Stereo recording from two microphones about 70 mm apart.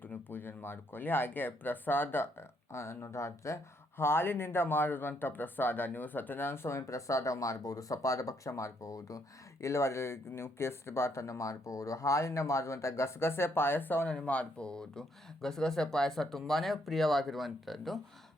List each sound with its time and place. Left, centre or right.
0.0 s speech: left
2.7 s speech: left
3.9 s speech: left
14.3 s speech: centre